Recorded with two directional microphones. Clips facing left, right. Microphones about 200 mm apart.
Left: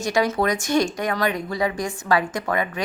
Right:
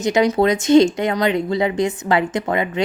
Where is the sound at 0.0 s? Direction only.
20° right (ahead or behind).